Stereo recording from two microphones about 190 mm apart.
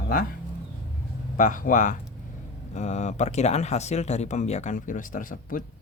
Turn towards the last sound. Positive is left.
turn(degrees=45)  # may be behind; listen again after turning